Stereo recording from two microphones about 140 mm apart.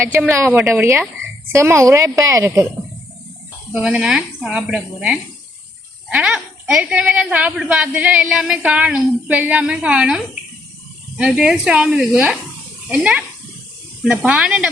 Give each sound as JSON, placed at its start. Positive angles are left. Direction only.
{"t": 0.0, "sound": "a woman's voice", "side_deg": -15}
{"t": 3.7, "sound": "a woman's voice", "side_deg": -5}
{"t": 11.2, "sound": "a woman's voice", "side_deg": -5}